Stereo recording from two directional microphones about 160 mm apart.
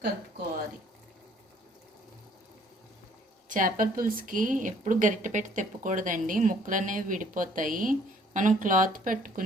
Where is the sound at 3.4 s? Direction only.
55° right (ahead or behind).